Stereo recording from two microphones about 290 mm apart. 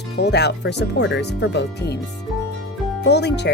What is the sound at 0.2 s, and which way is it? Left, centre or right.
Speech, left.